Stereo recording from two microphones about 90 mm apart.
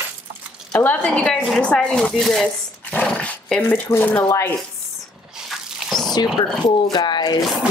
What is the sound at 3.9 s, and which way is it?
Speech, 20° left (ahead or behind).